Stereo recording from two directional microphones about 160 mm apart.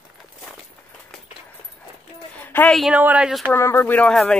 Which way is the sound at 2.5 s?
10° left (ahead or behind).